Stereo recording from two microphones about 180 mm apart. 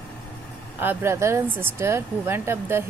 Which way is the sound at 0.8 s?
10° right (ahead or behind).